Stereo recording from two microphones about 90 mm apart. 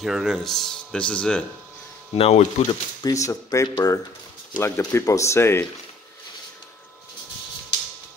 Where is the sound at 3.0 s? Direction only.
40° left (ahead or behind).